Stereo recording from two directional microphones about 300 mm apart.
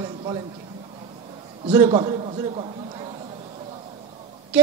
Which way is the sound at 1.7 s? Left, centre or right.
Centre.